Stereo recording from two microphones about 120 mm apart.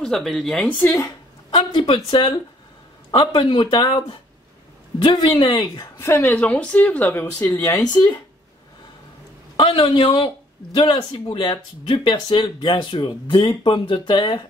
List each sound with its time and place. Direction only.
0.0 s a woman's voice: 5° left (ahead or behind)
0.7 s a woman's voice: 15° left (ahead or behind)
1.5 s speech: 40° left (ahead or behind)
5.9 s a woman's voice: 20° left (ahead or behind)
7.6 s speech: 30° left (ahead or behind)
9.6 s speech: 45° left (ahead or behind)